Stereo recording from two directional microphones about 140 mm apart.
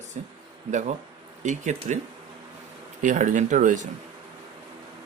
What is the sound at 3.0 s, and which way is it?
Speech, 65° right (ahead or behind).